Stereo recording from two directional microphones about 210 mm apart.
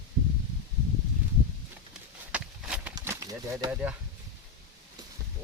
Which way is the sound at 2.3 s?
5° right (ahead or behind).